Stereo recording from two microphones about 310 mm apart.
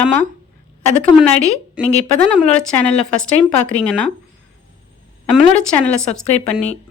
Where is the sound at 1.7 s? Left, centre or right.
Centre.